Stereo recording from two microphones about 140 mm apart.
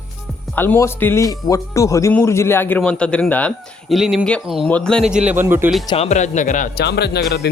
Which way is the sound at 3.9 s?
Centre (ahead or behind).